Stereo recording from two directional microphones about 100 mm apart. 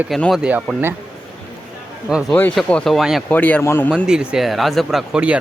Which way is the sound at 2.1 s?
5° right (ahead or behind).